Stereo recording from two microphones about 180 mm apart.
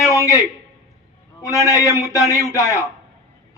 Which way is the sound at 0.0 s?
15° left (ahead or behind).